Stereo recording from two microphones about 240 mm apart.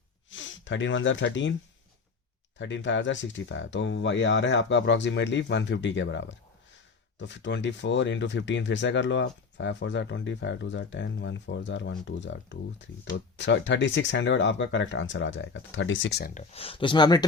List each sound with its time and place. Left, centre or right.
0.3 s speech: left
2.6 s speech: left
16.3 s speech: left